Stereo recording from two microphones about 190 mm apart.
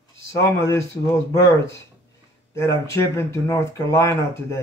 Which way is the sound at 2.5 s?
15° left (ahead or behind).